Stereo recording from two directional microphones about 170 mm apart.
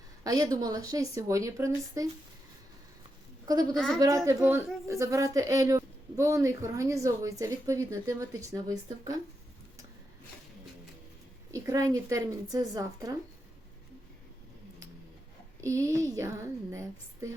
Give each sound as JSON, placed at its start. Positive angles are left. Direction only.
{"t": 0.3, "sound": "speech", "side_deg": -20}
{"t": 3.4, "sound": "a woman's voice", "side_deg": -20}
{"t": 3.8, "sound": "a woman's voice", "side_deg": 5}
{"t": 4.4, "sound": "speech", "side_deg": -15}
{"t": 11.5, "sound": "speech", "side_deg": -20}
{"t": 15.6, "sound": "a woman's voice", "side_deg": -15}